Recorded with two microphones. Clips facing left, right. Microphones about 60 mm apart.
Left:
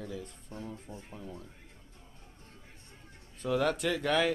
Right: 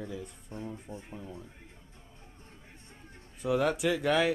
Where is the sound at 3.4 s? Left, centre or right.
Centre.